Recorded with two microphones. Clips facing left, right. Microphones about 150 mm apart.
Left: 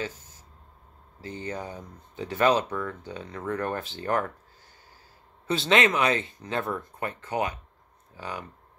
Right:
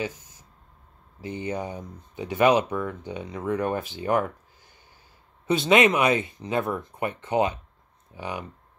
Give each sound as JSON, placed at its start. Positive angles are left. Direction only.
{"t": 0.2, "sound": "a sound", "side_deg": -15}
{"t": 1.2, "sound": "speech", "side_deg": -15}
{"t": 5.5, "sound": "speech", "side_deg": -15}